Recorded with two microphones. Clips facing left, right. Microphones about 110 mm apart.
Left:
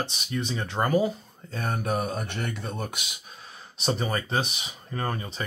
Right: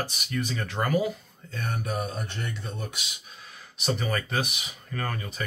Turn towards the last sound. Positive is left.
turn(degrees=25)  # may be behind; listen again after turning